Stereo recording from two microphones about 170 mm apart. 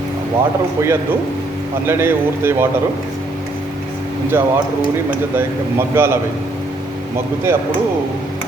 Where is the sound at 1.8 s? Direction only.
15° right (ahead or behind).